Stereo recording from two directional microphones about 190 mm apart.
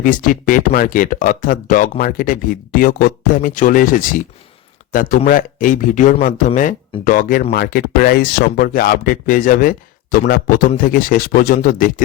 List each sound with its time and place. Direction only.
0.0 s speech: 45° left (ahead or behind)